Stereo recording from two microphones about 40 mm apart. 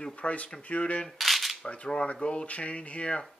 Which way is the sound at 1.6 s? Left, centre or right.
Left.